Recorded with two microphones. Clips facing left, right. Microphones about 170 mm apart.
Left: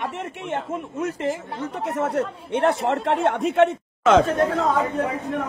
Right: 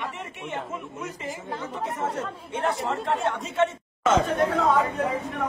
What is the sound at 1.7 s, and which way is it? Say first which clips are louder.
A man's voice: left 6 dB; 75° left (ahead or behind).